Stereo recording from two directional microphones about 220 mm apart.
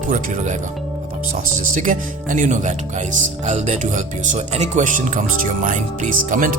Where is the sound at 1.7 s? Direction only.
35° right (ahead or behind).